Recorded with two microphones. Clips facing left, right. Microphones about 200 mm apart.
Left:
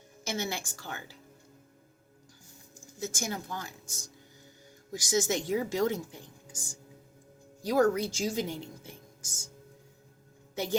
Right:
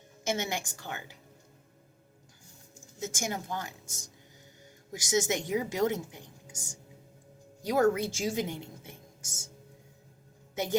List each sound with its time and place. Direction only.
0.3 s a woman's voice: 20° right (ahead or behind)
3.0 s a woman's voice: 20° right (ahead or behind)
4.9 s a woman's voice: 20° right (ahead or behind)
10.5 s speech: 20° right (ahead or behind)